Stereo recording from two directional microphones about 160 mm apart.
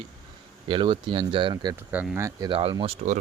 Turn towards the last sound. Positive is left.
turn(degrees=-45)  # may be behind; listen again after turning